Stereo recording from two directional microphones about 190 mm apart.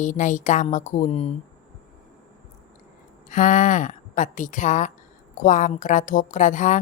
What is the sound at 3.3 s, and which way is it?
A woman's voice, 40° left (ahead or behind).